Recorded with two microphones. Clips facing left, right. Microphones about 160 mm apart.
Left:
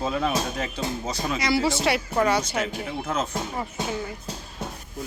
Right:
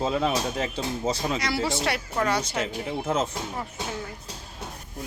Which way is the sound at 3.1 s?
25° right (ahead or behind).